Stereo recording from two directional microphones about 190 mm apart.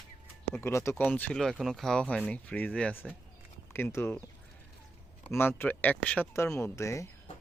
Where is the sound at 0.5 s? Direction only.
15° left (ahead or behind).